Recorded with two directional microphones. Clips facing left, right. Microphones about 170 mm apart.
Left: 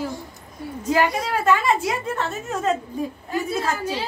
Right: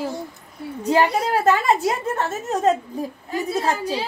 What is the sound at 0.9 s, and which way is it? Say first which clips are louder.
A woman's voice: right 3 dB; 30° right (ahead or behind).